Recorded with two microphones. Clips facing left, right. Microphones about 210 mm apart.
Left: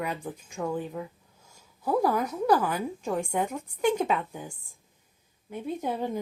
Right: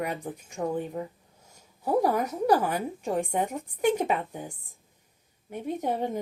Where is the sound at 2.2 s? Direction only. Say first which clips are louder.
Even; 40° right (ahead or behind).